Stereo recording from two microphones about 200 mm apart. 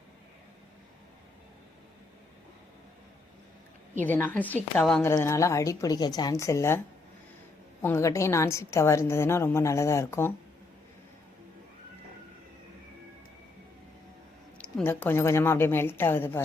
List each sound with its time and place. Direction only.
4.0 s a woman's voice: 10° left (ahead or behind)
5.0 s a woman's voice: 15° left (ahead or behind)
14.6 s a woman's voice: 10° left (ahead or behind)